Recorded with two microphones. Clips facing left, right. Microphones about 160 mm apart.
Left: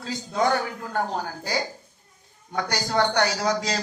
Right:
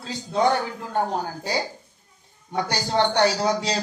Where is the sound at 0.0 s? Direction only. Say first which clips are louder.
Right 2 dB; 30° right (ahead or behind).